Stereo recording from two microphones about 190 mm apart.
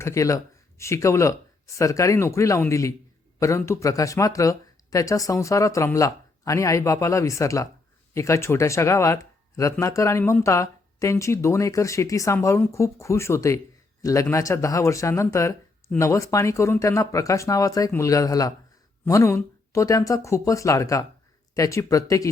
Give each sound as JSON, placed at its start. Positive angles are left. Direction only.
{"t": 0.0, "sound": "speech", "side_deg": 15}